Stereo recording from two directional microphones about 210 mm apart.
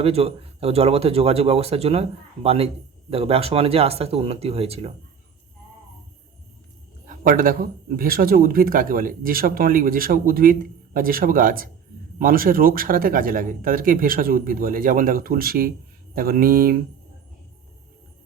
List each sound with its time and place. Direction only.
0.0 s speech: 30° right (ahead or behind)
7.1 s speech: 40° right (ahead or behind)